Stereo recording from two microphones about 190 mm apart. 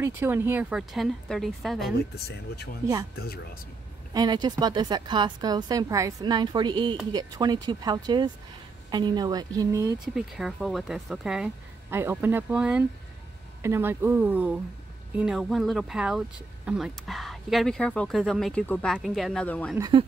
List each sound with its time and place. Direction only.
0.0 s speech: 10° right (ahead or behind)
2.1 s speech: 55° left (ahead or behind)
4.1 s a woman's voice: 20° right (ahead or behind)
10.1 s speech: centre (ahead or behind)
19.8 s a woman's voice: 25° right (ahead or behind)